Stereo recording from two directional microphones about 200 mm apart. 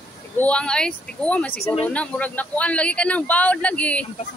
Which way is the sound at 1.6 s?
30° left (ahead or behind).